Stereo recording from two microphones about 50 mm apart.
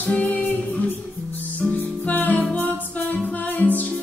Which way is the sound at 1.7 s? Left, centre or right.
Left.